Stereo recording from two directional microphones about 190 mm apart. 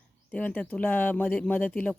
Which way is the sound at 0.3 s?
5° left (ahead or behind).